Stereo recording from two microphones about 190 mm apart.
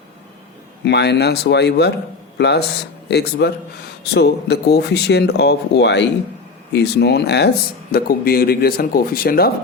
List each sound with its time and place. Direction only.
0.9 s speech: 60° left (ahead or behind)
7.9 s speech: 50° left (ahead or behind)